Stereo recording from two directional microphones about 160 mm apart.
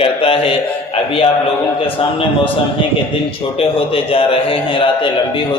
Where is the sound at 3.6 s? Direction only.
35° left (ahead or behind).